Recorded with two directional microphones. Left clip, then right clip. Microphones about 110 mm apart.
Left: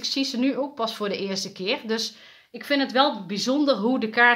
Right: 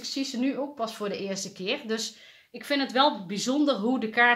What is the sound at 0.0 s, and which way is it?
Speech, 45° left (ahead or behind).